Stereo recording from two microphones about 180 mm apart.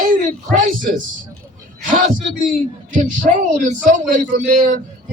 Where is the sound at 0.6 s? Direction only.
50° right (ahead or behind).